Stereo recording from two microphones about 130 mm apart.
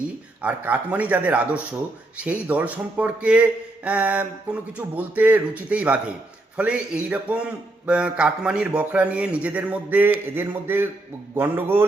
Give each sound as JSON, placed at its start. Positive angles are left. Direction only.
{"t": 0.4, "sound": "a man's voice", "side_deg": -10}